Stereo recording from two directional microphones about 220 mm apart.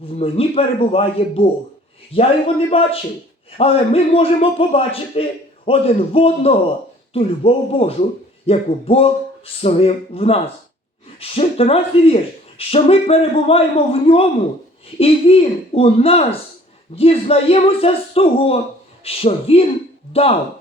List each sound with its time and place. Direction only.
0.0 s speech: 25° left (ahead or behind)